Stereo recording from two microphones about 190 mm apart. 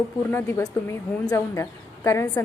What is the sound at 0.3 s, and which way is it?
A woman's voice, 15° left (ahead or behind).